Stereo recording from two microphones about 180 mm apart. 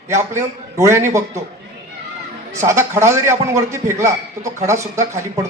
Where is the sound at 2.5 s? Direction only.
15° right (ahead or behind).